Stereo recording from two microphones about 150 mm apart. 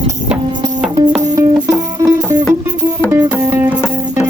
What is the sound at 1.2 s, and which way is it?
Music, 25° right (ahead or behind).